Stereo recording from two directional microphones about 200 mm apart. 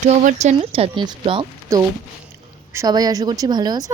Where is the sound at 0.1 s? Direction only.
40° right (ahead or behind).